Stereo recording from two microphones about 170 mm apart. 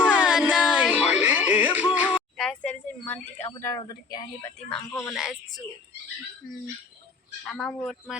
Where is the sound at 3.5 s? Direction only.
15° left (ahead or behind).